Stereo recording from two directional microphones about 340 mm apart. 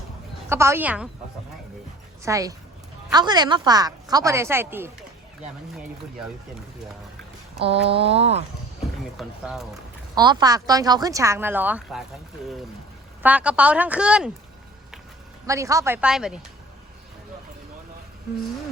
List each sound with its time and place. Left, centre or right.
0.5 s speech: centre
2.2 s a woman's voice: centre
7.6 s speech: centre
9.1 s a woman's voice: centre
10.2 s speech: centre
13.2 s a woman's voice: centre
15.4 s speech: centre